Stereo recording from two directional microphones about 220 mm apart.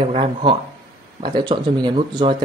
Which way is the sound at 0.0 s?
20° right (ahead or behind).